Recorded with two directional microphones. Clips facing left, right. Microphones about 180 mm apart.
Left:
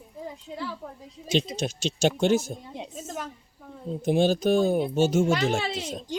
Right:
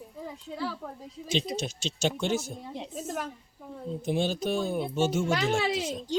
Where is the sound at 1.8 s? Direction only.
70° left (ahead or behind).